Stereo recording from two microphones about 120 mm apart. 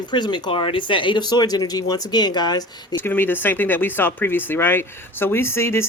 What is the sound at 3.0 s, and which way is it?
Speech, 15° left (ahead or behind).